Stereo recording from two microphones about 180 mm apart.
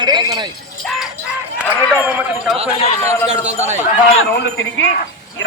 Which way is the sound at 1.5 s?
10° right (ahead or behind).